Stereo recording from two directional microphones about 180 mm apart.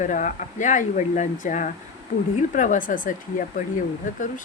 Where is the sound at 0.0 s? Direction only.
45° left (ahead or behind).